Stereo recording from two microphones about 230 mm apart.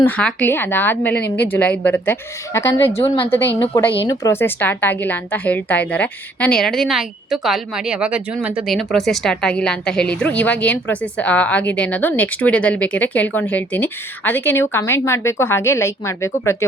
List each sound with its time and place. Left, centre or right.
0.0 s a woman's voice: centre
2.9 s a woman's voice: left
4.0 s a woman's voice: centre